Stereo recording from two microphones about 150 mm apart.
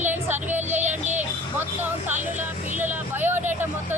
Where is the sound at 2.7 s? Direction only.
15° right (ahead or behind).